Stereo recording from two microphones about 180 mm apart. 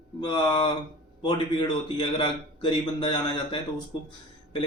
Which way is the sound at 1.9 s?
25° left (ahead or behind).